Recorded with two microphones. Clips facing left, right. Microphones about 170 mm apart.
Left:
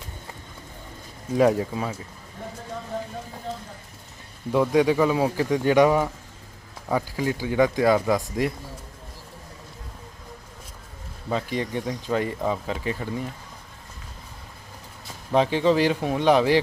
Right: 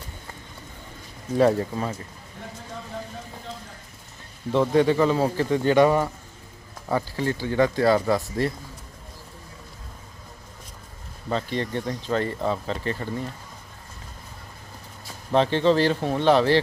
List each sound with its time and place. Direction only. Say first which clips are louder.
1.4 s speech: even; 10° left (ahead or behind)
4.5 s speech: even; 10° left (ahead or behind)
11.3 s speech: even; 10° left (ahead or behind)
15.3 s speech: even; 10° left (ahead or behind)